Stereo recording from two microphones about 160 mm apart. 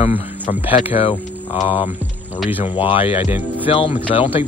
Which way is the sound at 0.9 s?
35° left (ahead or behind).